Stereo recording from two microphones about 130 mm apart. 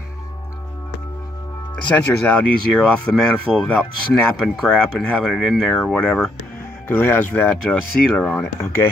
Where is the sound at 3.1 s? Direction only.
5° left (ahead or behind).